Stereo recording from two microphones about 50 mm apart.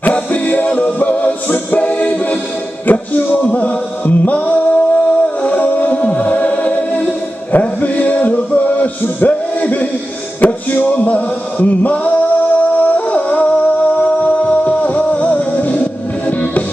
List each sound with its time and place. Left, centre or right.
0.1 s music: left
11.6 s singing: left